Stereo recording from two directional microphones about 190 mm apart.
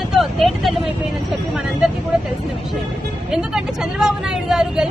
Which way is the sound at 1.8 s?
Centre (ahead or behind).